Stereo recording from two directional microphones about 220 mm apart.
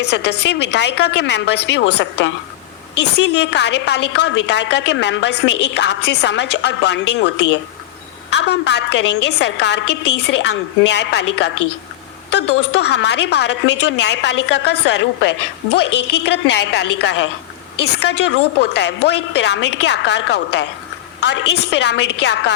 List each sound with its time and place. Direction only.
0.0 s a woman's voice: 50° left (ahead or behind)
8.3 s a woman's voice: 50° left (ahead or behind)
18.6 s a woman's voice: 50° left (ahead or behind)